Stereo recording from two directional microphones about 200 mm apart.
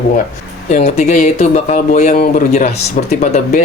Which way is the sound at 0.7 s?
35° left (ahead or behind).